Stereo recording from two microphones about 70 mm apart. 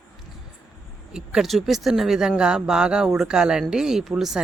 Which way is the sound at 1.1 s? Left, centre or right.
Centre.